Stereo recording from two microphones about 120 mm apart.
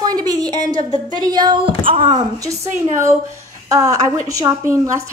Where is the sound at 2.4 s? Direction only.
25° right (ahead or behind).